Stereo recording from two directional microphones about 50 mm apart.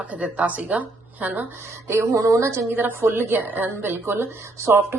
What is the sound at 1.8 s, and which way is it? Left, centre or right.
Speech, right.